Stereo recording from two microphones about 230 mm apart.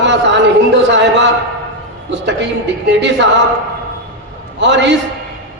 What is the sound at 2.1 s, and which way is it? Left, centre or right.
Speech, right.